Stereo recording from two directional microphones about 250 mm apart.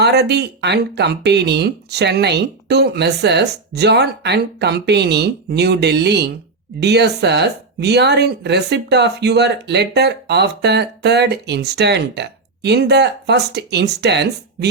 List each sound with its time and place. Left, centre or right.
0.0 s speech: right